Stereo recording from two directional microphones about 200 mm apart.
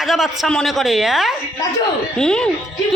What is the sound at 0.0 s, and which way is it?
A woman's voice, centre (ahead or behind).